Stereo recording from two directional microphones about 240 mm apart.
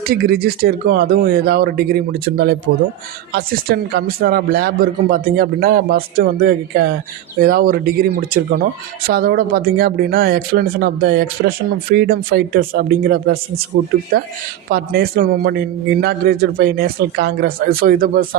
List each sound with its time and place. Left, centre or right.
0.1 s speech: right
14.7 s speech: right